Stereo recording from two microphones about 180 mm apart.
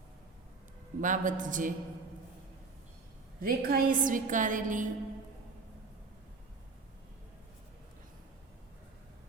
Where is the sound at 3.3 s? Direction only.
55° right (ahead or behind).